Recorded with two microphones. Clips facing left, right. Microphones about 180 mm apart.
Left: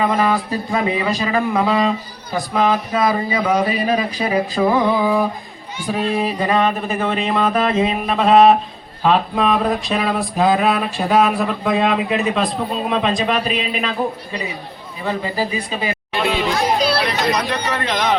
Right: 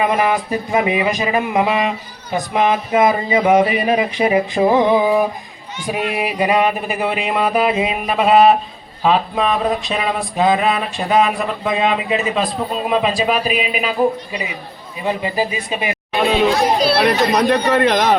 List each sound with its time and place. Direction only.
0.0 s speech: 20° right (ahead or behind)
9.0 s a sound: centre (ahead or behind)
15.0 s speech: 15° right (ahead or behind)
17.0 s speech: 60° right (ahead or behind)